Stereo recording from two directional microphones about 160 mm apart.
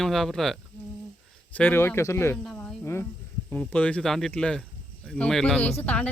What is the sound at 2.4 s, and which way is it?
Cricket, 5° left (ahead or behind).